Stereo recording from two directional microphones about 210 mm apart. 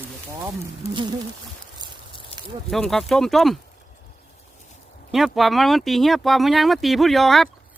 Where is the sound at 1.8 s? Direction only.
20° right (ahead or behind).